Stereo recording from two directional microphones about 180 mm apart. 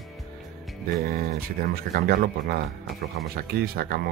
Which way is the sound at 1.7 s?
60° right (ahead or behind).